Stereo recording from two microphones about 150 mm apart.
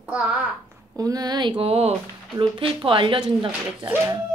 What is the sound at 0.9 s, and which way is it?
Speech, 25° right (ahead or behind).